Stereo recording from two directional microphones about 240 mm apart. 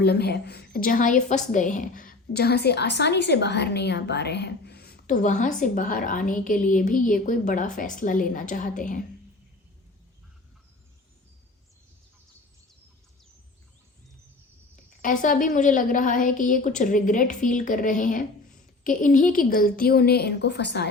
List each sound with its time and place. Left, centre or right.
0.0 s a woman's voice: left
15.0 s a woman's voice: left